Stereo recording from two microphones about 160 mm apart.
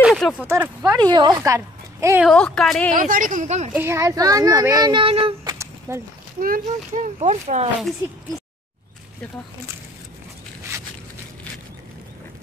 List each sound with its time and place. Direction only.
0.0 s a sound: centre (ahead or behind)
0.4 s speech: 10° right (ahead or behind)
0.9 s speech: 25° right (ahead or behind)
2.2 s a woman's voice: 5° left (ahead or behind)
2.9 s speech: 55° right (ahead or behind)
3.7 s speech: 15° right (ahead or behind); by 5.3 s 35° right (ahead or behind)
5.4 s a sound: 20° right (ahead or behind)
6.4 s speech: 60° right (ahead or behind)
7.2 s speech: 45° right (ahead or behind)